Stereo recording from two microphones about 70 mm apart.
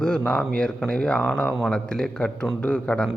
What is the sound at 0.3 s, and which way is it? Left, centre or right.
A man's voice, centre.